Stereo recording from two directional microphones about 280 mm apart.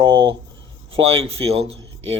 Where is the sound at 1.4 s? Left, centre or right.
Right.